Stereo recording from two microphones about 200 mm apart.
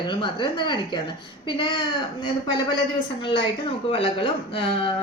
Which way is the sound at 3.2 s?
25° left (ahead or behind).